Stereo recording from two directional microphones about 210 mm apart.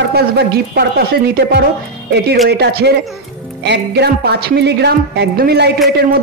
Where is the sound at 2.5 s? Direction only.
50° right (ahead or behind).